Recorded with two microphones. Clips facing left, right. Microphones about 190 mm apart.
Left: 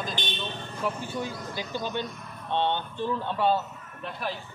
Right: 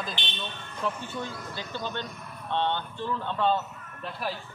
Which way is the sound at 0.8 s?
15° left (ahead or behind).